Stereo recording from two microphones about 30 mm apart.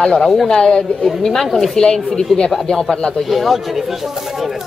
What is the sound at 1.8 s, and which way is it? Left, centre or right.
Speech, left.